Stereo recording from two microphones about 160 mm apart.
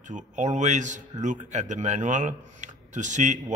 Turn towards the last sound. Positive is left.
turn(degrees=-50)  # may be behind; listen again after turning